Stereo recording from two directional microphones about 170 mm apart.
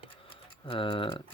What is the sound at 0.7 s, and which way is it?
Speech, 30° left (ahead or behind).